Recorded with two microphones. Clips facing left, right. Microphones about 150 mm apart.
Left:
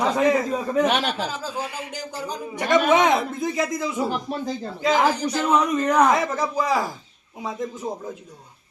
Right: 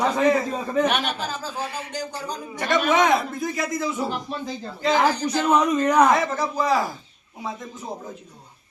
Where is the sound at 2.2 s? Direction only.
15° left (ahead or behind).